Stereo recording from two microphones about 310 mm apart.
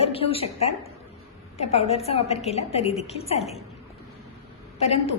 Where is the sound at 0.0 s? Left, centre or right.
Centre.